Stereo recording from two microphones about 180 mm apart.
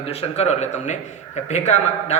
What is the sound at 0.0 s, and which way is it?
A man's voice, 35° left (ahead or behind).